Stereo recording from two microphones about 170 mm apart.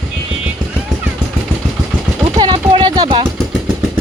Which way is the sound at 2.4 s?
25° right (ahead or behind).